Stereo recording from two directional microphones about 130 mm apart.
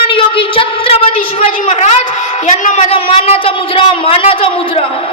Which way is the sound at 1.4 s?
65° left (ahead or behind).